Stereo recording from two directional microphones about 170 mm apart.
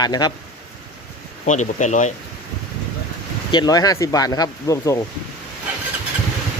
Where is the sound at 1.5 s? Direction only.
45° left (ahead or behind).